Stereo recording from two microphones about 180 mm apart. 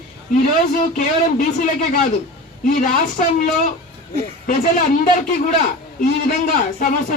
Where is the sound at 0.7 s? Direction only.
45° left (ahead or behind).